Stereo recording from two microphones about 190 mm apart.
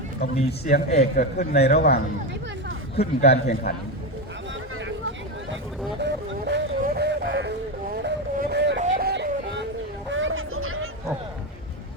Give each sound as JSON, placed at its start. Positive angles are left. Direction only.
{"t": 0.3, "sound": "a man's voice", "side_deg": 35}
{"t": 1.7, "sound": "speech", "side_deg": 55}
{"t": 2.9, "sound": "a man's voice", "side_deg": 35}
{"t": 3.5, "sound": "a man's voice", "side_deg": 55}
{"t": 6.0, "sound": "a sound", "side_deg": -55}
{"t": 8.8, "sound": "music", "side_deg": -50}
{"t": 10.1, "sound": "a sound", "side_deg": -90}